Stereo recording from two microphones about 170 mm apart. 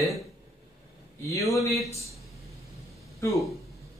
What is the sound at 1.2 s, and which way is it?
Speech, 20° left (ahead or behind).